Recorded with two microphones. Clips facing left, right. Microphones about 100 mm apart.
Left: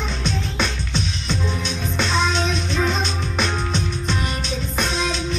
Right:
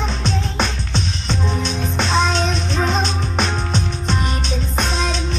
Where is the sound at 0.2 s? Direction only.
30° right (ahead or behind).